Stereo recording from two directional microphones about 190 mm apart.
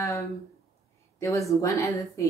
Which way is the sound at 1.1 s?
15° left (ahead or behind).